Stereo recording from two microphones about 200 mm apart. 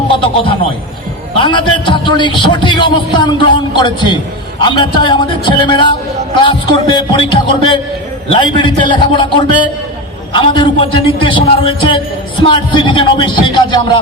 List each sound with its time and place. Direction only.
1.4 s a man's voice: 25° left (ahead or behind)